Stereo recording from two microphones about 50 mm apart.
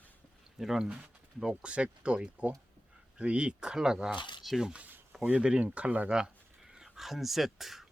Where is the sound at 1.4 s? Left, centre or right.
Centre.